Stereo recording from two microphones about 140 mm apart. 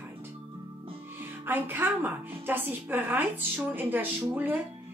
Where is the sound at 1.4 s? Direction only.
15° right (ahead or behind).